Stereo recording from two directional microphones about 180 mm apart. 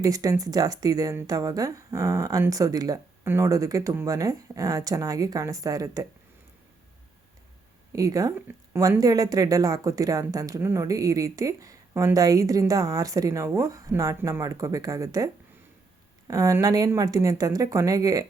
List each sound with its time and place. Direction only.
0.0 s a woman's voice: 20° right (ahead or behind)
7.9 s a woman's voice: 20° right (ahead or behind)